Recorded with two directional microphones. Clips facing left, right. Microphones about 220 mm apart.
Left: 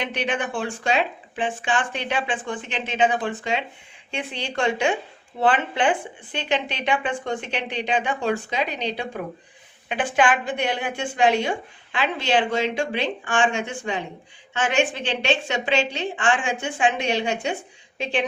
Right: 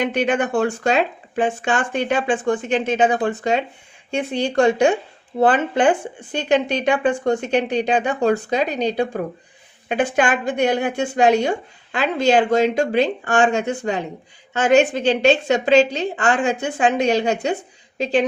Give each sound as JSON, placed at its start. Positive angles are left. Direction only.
{"t": 0.0, "sound": "a woman's voice", "side_deg": -45}